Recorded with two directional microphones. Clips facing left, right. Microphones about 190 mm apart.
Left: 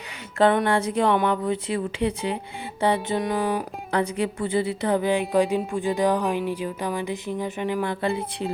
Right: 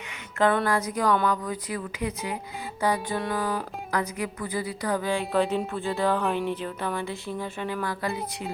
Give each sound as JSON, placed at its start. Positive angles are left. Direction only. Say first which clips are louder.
{"t": 0.5, "sound": "speech", "louder": "left 3 dB", "side_deg": 25}